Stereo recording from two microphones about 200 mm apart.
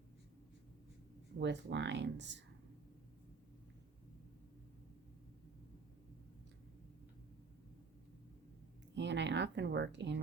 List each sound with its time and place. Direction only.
1.4 s speech: 65° right (ahead or behind)
9.0 s speech: 60° right (ahead or behind)